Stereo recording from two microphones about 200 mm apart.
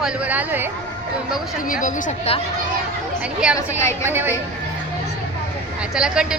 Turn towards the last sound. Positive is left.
turn(degrees=-5)  # may be behind; listen again after turning